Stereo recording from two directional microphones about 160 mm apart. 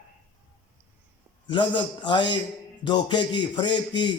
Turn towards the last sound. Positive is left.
turn(degrees=30)  # may be behind; listen again after turning